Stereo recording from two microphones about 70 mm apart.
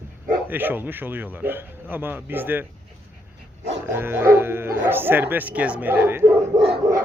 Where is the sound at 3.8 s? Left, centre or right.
Right.